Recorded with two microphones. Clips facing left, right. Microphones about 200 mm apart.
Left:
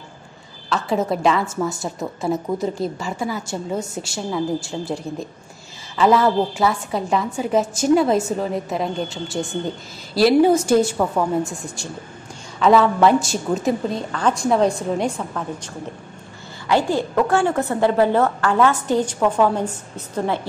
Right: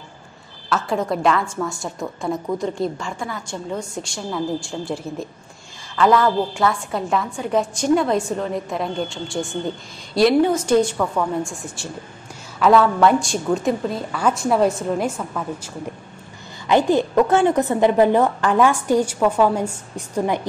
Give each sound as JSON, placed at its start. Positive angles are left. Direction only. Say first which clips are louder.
{"t": 0.7, "sound": "a woman's voice", "louder": "left 1 dB", "side_deg": 0}
{"t": 2.0, "sound": "a woman's voice", "louder": "left 1 dB", "side_deg": 20}
{"t": 2.6, "sound": "a woman's voice", "louder": "even", "side_deg": 5}
{"t": 16.6, "sound": "a woman's voice", "louder": "right 3 dB", "side_deg": -20}